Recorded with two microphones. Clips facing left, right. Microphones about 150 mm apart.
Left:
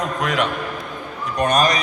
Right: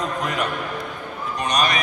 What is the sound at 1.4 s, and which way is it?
Speech, 50° left (ahead or behind).